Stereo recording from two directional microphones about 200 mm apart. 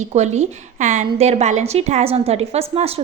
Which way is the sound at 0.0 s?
35° right (ahead or behind).